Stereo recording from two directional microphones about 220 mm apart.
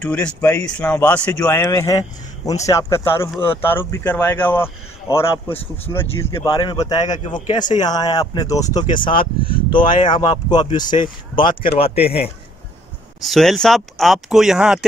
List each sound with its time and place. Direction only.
0.0 s speech: 5° left (ahead or behind); by 12.3 s 25° left (ahead or behind)
13.2 s speech: centre (ahead or behind)